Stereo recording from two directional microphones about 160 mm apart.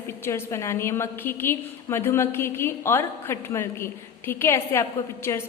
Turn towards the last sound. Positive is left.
turn(degrees=20)  # may be behind; listen again after turning